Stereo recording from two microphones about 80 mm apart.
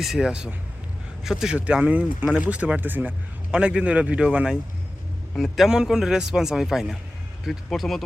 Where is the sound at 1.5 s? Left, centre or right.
Centre.